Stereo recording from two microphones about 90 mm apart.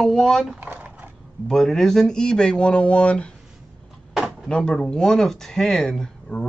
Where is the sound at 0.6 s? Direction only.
20° right (ahead or behind).